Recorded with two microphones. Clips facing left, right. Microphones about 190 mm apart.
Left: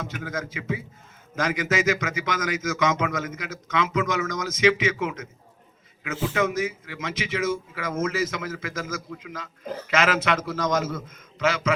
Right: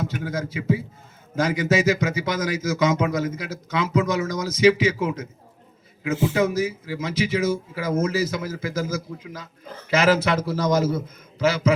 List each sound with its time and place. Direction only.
0.0 s speech: 35° right (ahead or behind)
6.3 s speech: 35° right (ahead or behind)